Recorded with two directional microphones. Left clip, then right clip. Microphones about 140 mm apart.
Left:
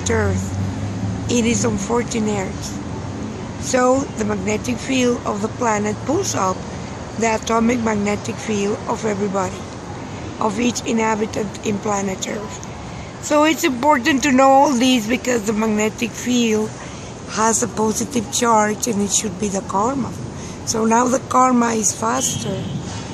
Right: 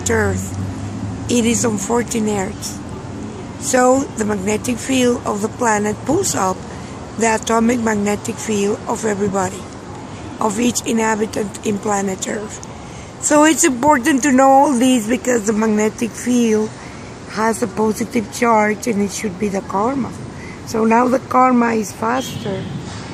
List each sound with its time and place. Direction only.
0.0 s speech: 20° right (ahead or behind)
1.3 s speech: 20° right (ahead or behind)
3.6 s speech: 20° right (ahead or behind)
14.2 s a woman's voice: 5° right (ahead or behind)
15.4 s speech: 20° right (ahead or behind)